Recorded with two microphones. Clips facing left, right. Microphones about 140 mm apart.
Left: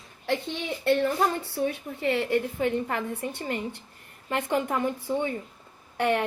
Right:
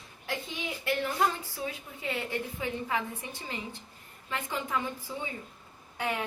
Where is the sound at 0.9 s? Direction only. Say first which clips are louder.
Left 8 dB; 70° left (ahead or behind).